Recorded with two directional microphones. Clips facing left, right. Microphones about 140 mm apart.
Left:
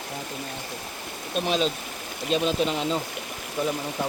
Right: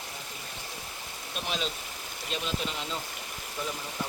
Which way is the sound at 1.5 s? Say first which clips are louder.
Left 9 dB; 25° left (ahead or behind).